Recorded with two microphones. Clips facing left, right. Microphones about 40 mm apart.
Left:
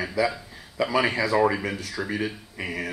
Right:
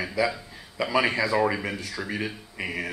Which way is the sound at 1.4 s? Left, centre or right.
Centre.